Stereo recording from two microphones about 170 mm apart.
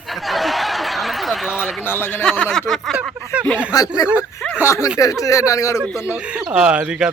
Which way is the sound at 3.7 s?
20° left (ahead or behind).